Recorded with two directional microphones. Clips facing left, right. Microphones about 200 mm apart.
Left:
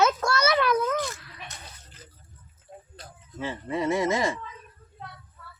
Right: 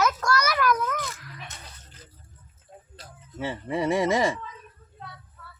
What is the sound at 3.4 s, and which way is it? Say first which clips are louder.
Speech: right 1 dB; 15° right (ahead or behind).